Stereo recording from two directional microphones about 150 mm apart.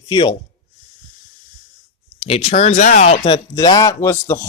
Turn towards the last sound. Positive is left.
turn(degrees=15)  # may be behind; listen again after turning